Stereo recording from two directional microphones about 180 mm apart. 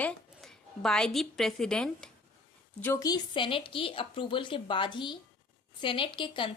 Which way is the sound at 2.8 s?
15° left (ahead or behind).